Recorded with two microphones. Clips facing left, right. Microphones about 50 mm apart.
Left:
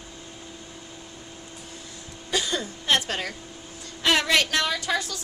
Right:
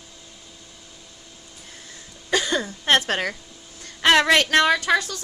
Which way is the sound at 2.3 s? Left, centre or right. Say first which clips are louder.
Right 4 dB; right.